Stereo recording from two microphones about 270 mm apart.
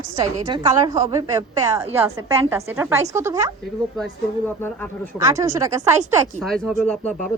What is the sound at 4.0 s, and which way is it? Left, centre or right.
Speech, centre.